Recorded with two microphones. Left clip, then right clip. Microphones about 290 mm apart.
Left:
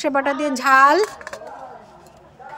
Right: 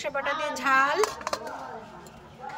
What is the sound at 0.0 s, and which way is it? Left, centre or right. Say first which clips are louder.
A woman's voice: left 9 dB; centre.